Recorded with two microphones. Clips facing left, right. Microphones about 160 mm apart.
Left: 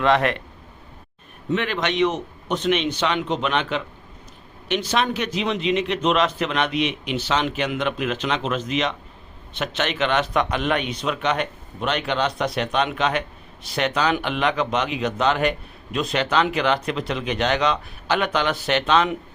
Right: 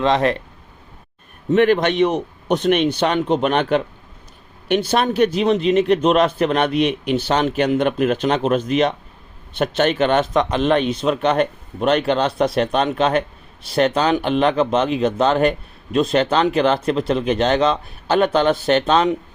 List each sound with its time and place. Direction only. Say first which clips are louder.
0.0 s speech: right 2 dB; 30° right (ahead or behind)
1.5 s speech: right 9 dB; 50° right (ahead or behind)
4.9 s speech: right 7 dB; 45° right (ahead or behind)
10.2 s speech: right 4 dB; 25° right (ahead or behind)